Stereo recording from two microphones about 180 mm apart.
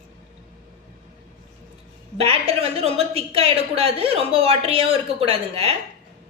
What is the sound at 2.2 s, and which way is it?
A woman's voice, 35° right (ahead or behind).